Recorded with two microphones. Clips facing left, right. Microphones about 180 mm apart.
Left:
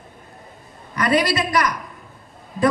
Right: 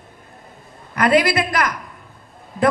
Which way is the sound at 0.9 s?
55° right (ahead or behind).